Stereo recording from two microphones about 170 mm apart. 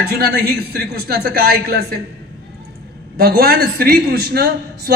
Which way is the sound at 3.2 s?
65° right (ahead or behind).